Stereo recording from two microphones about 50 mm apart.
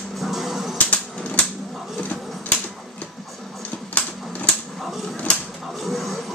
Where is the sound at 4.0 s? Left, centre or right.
Left.